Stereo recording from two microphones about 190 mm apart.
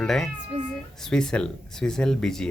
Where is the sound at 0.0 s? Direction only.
Centre (ahead or behind).